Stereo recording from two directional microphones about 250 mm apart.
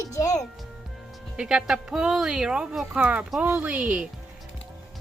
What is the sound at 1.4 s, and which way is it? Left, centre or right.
Speech, centre.